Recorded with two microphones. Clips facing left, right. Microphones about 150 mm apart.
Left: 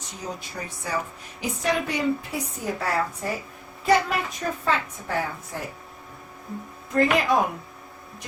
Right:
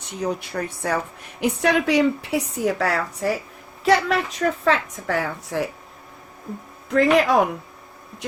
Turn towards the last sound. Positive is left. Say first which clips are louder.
# right 4 dB
turn(degrees=-80)